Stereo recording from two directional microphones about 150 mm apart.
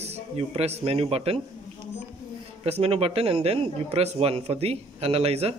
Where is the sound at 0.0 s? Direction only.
45° right (ahead or behind).